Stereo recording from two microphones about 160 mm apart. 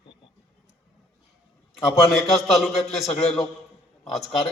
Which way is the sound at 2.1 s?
Centre (ahead or behind).